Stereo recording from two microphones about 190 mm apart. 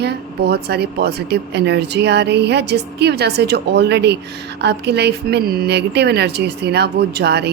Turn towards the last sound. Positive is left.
turn(degrees=-60)  # may be behind; listen again after turning